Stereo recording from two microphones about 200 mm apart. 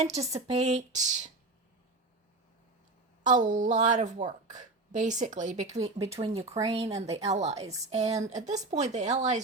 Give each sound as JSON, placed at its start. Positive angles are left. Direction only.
{"t": 0.0, "sound": "a woman's voice", "side_deg": -35}
{"t": 3.2, "sound": "a woman's voice", "side_deg": -40}